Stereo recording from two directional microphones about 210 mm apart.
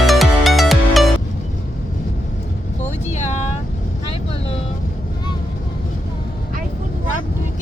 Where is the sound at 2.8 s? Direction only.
35° left (ahead or behind).